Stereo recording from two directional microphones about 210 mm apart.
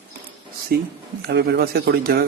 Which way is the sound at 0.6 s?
50° right (ahead or behind).